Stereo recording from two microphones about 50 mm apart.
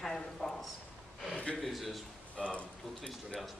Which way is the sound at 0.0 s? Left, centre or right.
Centre.